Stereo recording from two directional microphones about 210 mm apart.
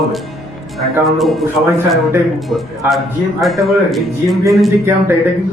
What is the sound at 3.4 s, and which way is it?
Speech, centre (ahead or behind).